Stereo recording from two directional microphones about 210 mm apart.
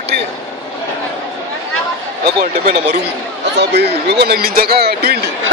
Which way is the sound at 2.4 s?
45° right (ahead or behind).